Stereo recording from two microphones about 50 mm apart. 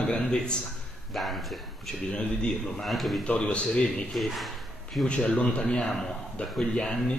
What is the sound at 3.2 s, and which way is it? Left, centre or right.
Speech, left.